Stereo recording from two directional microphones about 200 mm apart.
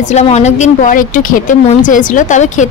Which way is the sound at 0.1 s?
35° left (ahead or behind).